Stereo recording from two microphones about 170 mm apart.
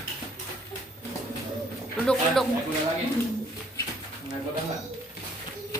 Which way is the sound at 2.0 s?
5° left (ahead or behind).